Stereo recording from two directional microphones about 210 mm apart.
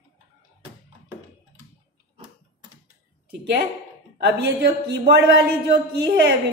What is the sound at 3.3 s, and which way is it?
A woman's voice, 50° right (ahead or behind).